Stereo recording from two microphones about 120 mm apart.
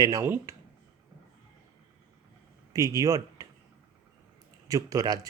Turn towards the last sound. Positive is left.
turn(degrees=-30)  # may be behind; listen again after turning